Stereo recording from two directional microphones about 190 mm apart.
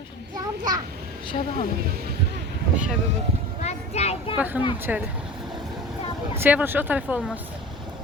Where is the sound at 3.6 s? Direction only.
35° left (ahead or behind).